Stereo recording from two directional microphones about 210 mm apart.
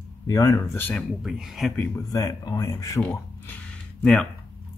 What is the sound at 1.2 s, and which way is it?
Speech, centre (ahead or behind).